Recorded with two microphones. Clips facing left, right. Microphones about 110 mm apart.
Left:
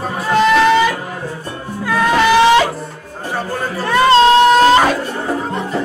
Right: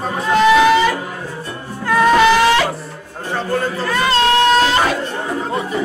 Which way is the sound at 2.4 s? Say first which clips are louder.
Left 3 dB; 20° left (ahead or behind).